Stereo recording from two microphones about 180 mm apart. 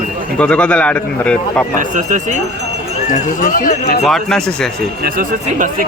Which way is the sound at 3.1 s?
45° left (ahead or behind).